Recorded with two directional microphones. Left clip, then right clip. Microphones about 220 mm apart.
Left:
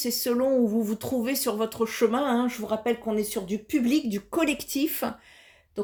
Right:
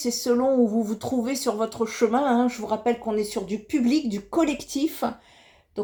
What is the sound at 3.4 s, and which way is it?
Speech, 45° left (ahead or behind).